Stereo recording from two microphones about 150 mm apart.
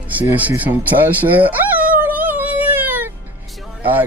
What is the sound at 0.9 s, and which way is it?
Music, 10° right (ahead or behind).